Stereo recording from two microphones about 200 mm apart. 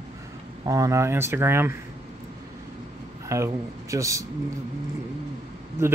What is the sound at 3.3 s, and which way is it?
Speech, 15° right (ahead or behind).